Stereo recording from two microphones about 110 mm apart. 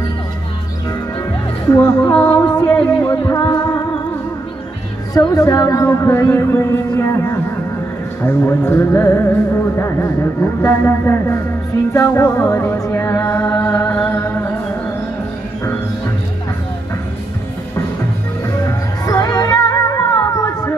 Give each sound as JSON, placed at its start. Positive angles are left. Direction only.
{"t": 1.7, "sound": "speech", "side_deg": 20}
{"t": 2.1, "sound": "music", "side_deg": 15}
{"t": 3.1, "sound": "music", "side_deg": 30}
{"t": 5.1, "sound": "speech", "side_deg": 30}
{"t": 13.6, "sound": "music", "side_deg": 15}
{"t": 18.7, "sound": "music", "side_deg": 30}